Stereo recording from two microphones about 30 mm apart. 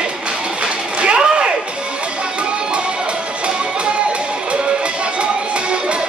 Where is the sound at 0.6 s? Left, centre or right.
Right.